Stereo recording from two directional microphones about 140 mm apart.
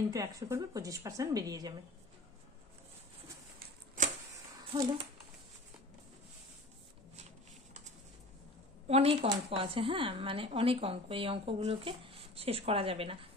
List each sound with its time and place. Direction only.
0.1 s a woman's voice: 25° right (ahead or behind)
3.5 s a sound: 70° right (ahead or behind)
8.8 s speech: 45° right (ahead or behind)